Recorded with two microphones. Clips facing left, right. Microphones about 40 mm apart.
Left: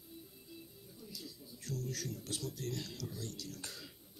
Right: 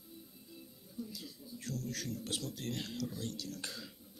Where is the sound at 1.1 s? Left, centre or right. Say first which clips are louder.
Right 2 dB; right.